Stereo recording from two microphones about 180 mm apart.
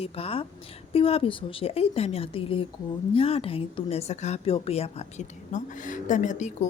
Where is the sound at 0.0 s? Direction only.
35° left (ahead or behind).